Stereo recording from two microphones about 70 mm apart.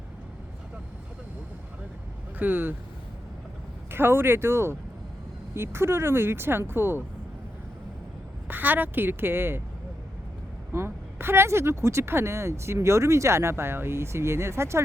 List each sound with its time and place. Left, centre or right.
2.4 s speech: right
3.9 s speech: right
8.4 s speech: right
10.7 s speech: right